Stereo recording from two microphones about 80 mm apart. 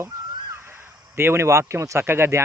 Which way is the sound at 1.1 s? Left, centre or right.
Right.